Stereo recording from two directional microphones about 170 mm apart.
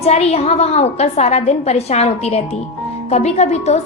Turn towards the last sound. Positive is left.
turn(degrees=40)  # may be behind; listen again after turning